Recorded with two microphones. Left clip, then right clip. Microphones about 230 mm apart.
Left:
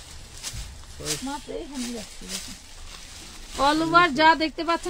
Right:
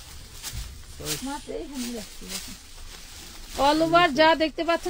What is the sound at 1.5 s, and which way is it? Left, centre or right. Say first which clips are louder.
Speech: right 2 dB; centre.